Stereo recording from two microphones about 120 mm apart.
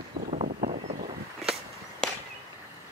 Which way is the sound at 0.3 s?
90° right.